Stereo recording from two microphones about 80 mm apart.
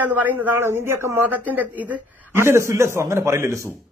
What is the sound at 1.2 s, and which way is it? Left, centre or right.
Speech, right.